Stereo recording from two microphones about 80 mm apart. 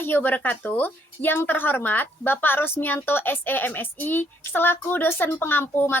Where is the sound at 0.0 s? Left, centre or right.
Left.